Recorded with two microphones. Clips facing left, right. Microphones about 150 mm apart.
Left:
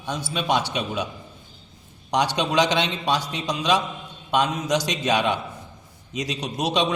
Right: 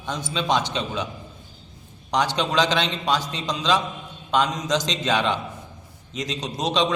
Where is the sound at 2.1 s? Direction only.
15° left (ahead or behind).